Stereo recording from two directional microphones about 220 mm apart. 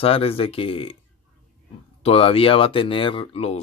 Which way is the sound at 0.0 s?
25° left (ahead or behind).